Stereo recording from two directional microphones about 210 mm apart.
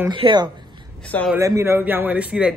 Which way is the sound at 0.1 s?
20° right (ahead or behind).